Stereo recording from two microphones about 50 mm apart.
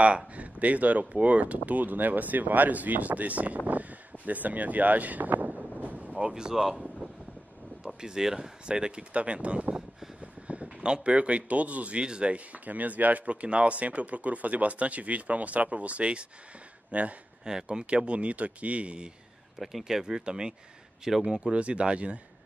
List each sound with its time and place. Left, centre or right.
0.4 s speech: right
5.6 s wind noise: right
6.2 s speech: centre
6.6 s wind noise: centre
7.8 s speech: centre; by 17.1 s right
17.5 s speech: centre
19.6 s speech: centre; by 22.2 s right